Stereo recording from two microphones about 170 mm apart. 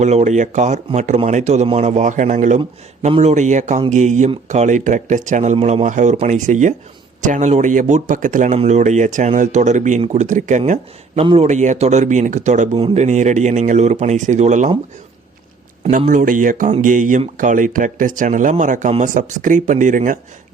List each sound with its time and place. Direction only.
0.0 s speech: 40° right (ahead or behind)
15.9 s speech: 50° right (ahead or behind)